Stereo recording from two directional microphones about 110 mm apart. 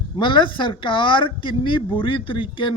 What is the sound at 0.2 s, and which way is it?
Speech, 50° left (ahead or behind).